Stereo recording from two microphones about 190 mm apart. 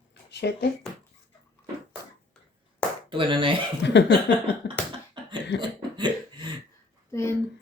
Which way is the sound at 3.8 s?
65° left (ahead or behind).